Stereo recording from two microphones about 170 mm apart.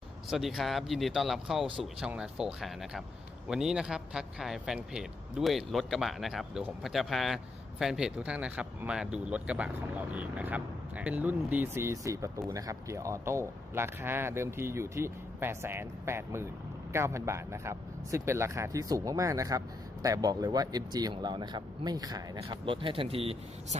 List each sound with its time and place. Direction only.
0.3 s a man's voice: centre (ahead or behind); by 23.4 s 35° right (ahead or behind)